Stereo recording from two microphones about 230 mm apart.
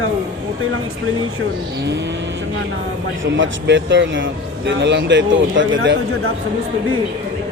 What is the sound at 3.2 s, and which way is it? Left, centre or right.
Speech, right.